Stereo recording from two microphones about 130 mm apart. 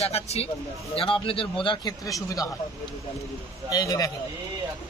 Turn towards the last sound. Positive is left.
turn(degrees=30)  # may be behind; listen again after turning